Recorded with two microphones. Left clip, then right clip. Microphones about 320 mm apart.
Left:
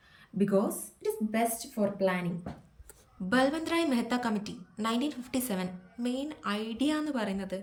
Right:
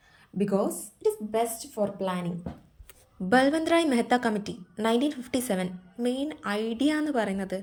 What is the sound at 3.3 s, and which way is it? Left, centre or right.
A woman's voice, centre.